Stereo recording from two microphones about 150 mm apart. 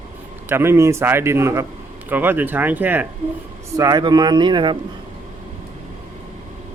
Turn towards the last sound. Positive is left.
turn(degrees=-30)  # may be behind; listen again after turning